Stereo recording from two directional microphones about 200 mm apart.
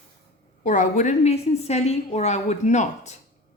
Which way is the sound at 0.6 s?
40° left (ahead or behind).